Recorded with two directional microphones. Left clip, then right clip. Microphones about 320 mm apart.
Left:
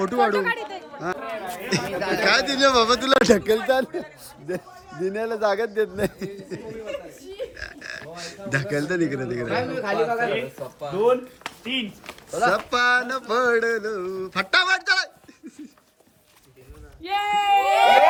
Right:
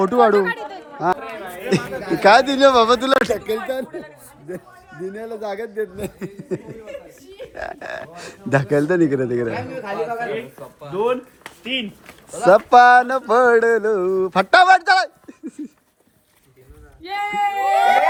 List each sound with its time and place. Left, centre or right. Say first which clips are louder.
0.0 s chatter: right 6 dB; centre
1.7 s a man's voice: right 2 dB; centre
5.0 s a man's voice: left 5 dB; centre
9.5 s speech: left 2 dB; left
11.7 s speech: right 3 dB; right
12.5 s a sound: right 11 dB; centre
17.0 s a man's voice: right 1 dB; centre